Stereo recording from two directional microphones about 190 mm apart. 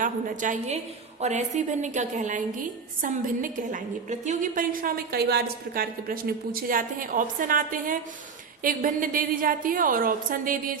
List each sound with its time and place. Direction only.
0.0 s a woman's voice: 40° right (ahead or behind)